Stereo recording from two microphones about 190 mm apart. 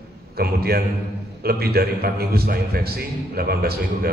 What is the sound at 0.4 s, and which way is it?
A man's voice, 55° right (ahead or behind).